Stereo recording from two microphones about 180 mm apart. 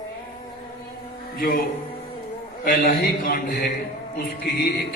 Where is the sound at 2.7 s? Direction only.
50° left (ahead or behind).